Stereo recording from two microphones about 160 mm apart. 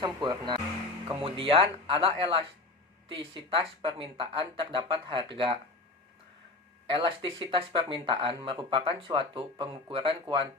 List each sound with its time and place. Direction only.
0.0 s speech: 30° right (ahead or behind)
6.9 s speech: 35° right (ahead or behind)